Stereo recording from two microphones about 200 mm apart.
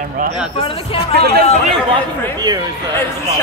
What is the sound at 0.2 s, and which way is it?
Speech, 45° right (ahead or behind).